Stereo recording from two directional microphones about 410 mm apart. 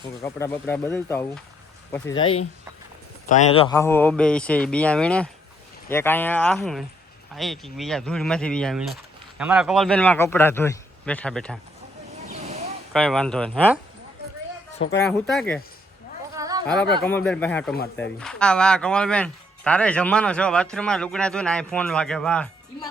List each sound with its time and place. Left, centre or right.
0.2 s speech: centre
12.3 s a sound: centre
12.9 s speech: centre
14.9 s speech: centre
16.3 s a sound: centre
17.1 s speech: centre